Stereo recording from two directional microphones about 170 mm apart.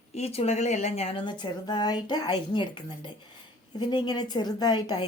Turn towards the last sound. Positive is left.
turn(degrees=25)  # may be behind; listen again after turning